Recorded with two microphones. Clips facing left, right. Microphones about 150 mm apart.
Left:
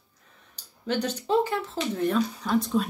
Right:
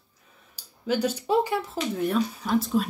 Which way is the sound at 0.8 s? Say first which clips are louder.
Right 2 dB; 10° right (ahead or behind).